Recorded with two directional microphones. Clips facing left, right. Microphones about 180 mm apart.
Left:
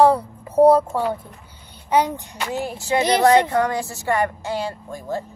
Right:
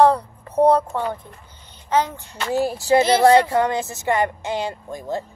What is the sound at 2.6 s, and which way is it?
Speech, 35° right (ahead or behind).